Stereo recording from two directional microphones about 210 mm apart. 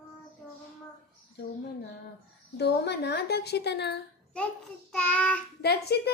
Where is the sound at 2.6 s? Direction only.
50° left (ahead or behind).